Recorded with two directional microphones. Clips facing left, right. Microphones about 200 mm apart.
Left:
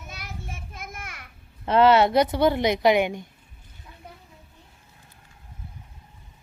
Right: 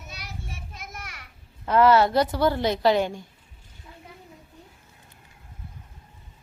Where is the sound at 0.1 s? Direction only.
50° left (ahead or behind).